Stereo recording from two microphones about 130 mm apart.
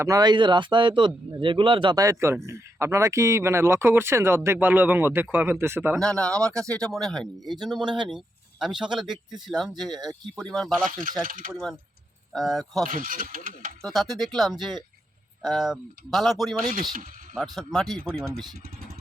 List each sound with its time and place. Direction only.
0.0 s speech: 30° right (ahead or behind)
2.0 s speech: 25° right (ahead or behind)
5.9 s speech: 5° left (ahead or behind)
9.9 s speech: 30° right (ahead or behind)
10.3 s speech: 5° left (ahead or behind)
10.8 s speech: 90° right
11.5 s speech: centre (ahead or behind)
12.9 s speech: 90° right
13.8 s speech: centre (ahead or behind)